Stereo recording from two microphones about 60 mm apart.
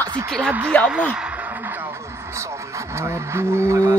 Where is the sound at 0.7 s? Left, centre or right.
Left.